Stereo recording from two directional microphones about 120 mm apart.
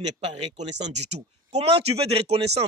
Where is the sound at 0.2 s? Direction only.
65° right (ahead or behind).